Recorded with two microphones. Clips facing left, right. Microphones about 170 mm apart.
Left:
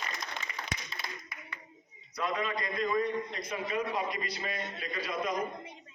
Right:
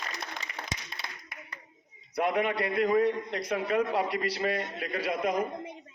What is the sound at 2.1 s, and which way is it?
A man's voice, 60° right (ahead or behind).